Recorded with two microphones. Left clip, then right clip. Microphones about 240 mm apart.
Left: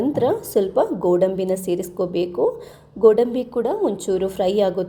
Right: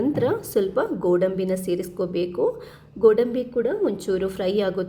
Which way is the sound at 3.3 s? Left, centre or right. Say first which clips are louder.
Left 2 dB; centre.